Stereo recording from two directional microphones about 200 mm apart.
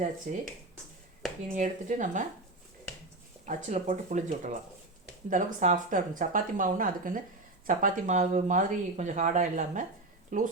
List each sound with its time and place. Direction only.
0.3 s speech: 45° right (ahead or behind)
1.5 s speech: 40° right (ahead or behind)
3.4 s speech: 35° right (ahead or behind)